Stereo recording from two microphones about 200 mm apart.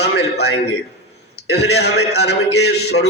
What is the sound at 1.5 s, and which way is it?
A man's voice, 55° left (ahead or behind).